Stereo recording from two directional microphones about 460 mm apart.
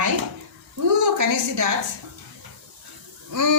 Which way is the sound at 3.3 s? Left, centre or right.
Right.